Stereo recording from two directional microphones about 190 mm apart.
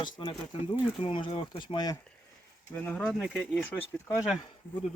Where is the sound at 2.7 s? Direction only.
5° left (ahead or behind).